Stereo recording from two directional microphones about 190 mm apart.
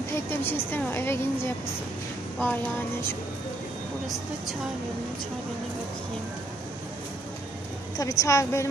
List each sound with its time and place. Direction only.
0.1 s speech: 10° left (ahead or behind)
8.0 s speech: 15° left (ahead or behind)